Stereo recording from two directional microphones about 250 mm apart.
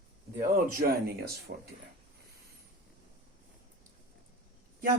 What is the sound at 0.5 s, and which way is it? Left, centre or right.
Speech, right.